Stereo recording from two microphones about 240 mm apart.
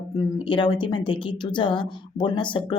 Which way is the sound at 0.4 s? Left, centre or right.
Centre.